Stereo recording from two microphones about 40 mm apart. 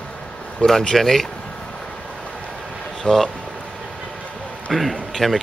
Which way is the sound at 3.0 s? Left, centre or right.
Centre.